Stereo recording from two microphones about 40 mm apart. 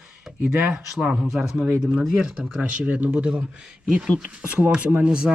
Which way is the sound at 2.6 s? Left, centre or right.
Right.